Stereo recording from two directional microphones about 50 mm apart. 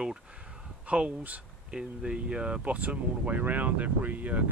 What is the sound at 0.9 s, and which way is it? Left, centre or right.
Speech, right.